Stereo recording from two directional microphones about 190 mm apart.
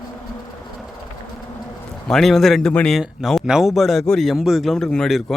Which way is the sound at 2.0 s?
Centre (ahead or behind).